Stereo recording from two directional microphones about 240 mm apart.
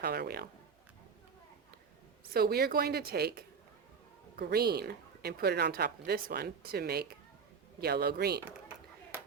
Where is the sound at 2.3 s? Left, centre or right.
Right.